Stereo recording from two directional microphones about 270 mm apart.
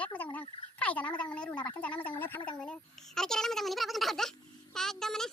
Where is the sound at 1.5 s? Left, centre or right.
Centre.